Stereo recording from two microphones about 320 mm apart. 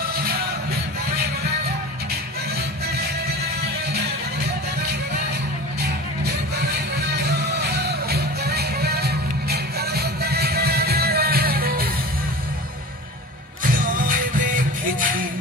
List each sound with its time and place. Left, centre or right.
0.1 s music: right
7.2 s music: right
13.7 s music: right